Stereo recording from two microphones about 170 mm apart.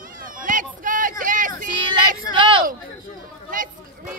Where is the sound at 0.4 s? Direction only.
50° right (ahead or behind).